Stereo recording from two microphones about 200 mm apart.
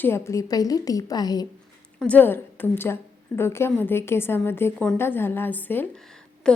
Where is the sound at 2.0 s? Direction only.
10° left (ahead or behind).